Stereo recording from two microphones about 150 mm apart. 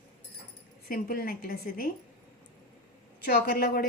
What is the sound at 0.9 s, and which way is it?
A woman's voice, 75° left (ahead or behind).